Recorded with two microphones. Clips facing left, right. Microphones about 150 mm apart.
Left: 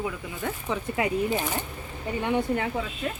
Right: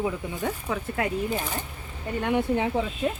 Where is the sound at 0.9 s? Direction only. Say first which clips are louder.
Left 2 dB; 5° left (ahead or behind).